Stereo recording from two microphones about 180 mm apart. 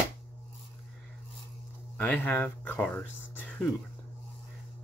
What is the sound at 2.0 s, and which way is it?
Speech, 10° left (ahead or behind).